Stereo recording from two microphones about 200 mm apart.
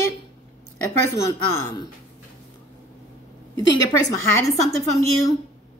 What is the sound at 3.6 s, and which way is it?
A woman's voice, 20° left (ahead or behind).